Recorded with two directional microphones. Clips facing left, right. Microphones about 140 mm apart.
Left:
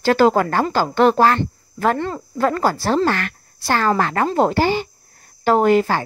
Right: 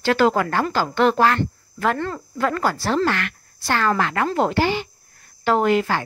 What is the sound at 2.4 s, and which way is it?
A woman's voice, 35° left (ahead or behind).